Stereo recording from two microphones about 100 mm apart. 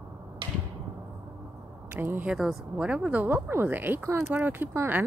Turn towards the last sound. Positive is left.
turn(degrees=-20)  # may be behind; listen again after turning